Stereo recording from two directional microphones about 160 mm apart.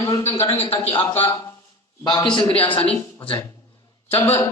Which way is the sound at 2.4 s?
10° left (ahead or behind).